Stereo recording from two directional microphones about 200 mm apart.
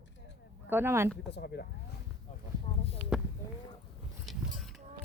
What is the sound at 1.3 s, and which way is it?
Speech, 55° left (ahead or behind).